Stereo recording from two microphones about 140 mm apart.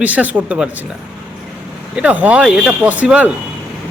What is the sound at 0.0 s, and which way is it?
Speech, 10° right (ahead or behind).